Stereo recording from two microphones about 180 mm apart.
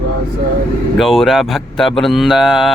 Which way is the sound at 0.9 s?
Centre (ahead or behind).